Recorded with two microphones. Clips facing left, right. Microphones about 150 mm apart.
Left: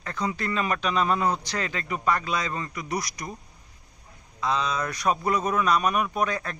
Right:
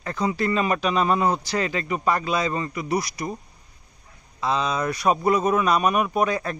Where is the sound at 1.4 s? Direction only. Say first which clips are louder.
Right 6 dB; 10° right (ahead or behind).